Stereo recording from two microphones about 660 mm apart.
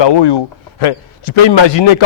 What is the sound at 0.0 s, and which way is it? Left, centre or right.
Speech, left.